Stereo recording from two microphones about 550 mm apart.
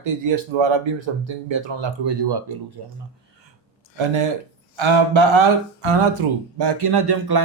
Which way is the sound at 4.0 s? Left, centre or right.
Right.